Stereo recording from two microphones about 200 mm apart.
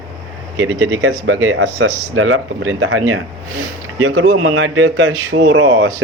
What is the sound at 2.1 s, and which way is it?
Speech, 90° right.